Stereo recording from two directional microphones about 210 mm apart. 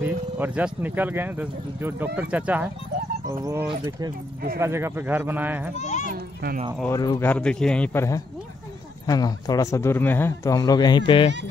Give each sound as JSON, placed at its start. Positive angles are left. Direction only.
{"t": 0.0, "sound": "speech", "side_deg": -10}
{"t": 5.8, "sound": "a child's voice", "side_deg": 35}
{"t": 6.1, "sound": "a sound", "side_deg": -50}
{"t": 6.8, "sound": "speech", "side_deg": 15}